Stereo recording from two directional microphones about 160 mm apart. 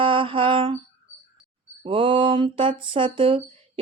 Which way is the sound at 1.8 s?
30° right (ahead or behind).